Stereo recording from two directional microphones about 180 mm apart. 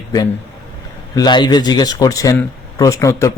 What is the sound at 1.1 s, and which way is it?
A man's voice, 25° left (ahead or behind).